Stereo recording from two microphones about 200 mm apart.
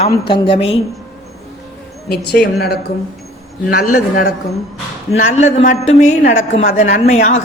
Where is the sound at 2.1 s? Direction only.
55° left (ahead or behind).